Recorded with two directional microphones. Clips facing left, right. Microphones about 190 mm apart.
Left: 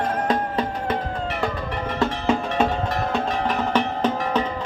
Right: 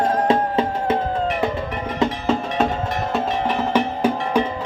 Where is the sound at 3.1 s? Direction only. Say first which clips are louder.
Right 2 dB; 10° right (ahead or behind).